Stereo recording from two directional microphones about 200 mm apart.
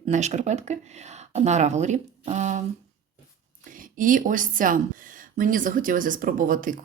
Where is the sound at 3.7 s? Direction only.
40° right (ahead or behind).